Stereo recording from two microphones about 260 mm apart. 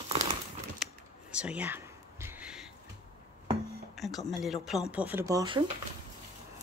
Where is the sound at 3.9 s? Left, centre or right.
Centre.